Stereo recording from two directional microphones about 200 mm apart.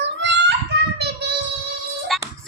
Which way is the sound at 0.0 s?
60° right (ahead or behind).